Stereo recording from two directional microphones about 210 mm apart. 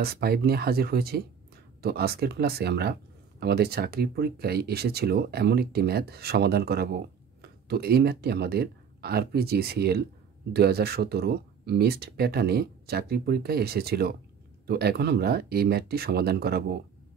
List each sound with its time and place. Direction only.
0.0 s speech: 45° right (ahead or behind)